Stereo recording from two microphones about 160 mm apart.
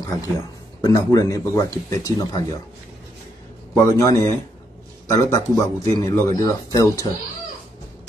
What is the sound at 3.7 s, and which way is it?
Speech, 20° left (ahead or behind).